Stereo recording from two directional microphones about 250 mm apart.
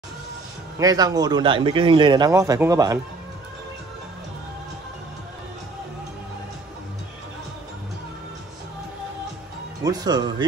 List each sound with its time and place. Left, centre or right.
0.7 s a man's voice: centre
9.8 s a man's voice: centre